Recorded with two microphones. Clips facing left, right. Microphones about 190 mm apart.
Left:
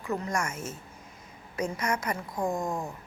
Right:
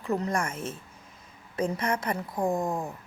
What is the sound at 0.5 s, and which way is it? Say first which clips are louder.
Speech: right 2 dB; 60° right (ahead or behind).